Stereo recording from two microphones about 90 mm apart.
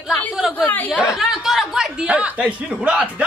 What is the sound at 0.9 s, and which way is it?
Speech, 5° right (ahead or behind).